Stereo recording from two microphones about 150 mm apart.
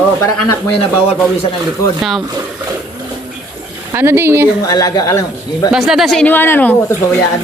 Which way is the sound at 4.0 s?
15° right (ahead or behind).